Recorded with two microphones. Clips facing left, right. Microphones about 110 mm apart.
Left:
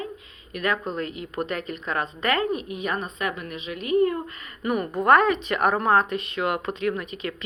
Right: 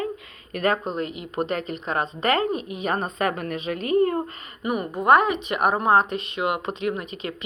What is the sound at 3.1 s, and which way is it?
A woman's voice, 45° right (ahead or behind).